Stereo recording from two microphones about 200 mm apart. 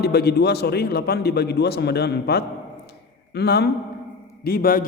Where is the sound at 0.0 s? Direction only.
55° left (ahead or behind).